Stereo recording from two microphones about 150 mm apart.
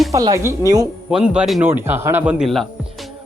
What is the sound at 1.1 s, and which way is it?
Speech, 5° right (ahead or behind).